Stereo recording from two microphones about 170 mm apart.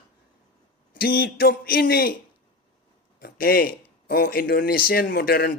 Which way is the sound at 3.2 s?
60° left (ahead or behind).